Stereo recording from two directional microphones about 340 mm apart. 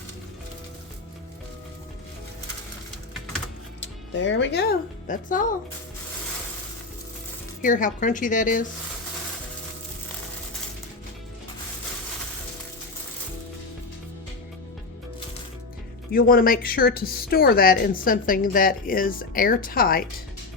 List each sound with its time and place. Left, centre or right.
3.8 s speech: left
7.6 s a woman's voice: left
16.1 s a woman's voice: left